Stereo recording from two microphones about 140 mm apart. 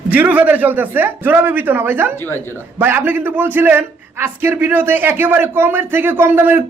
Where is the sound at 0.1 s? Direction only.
10° right (ahead or behind).